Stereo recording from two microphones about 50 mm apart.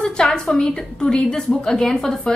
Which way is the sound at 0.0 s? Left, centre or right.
Centre.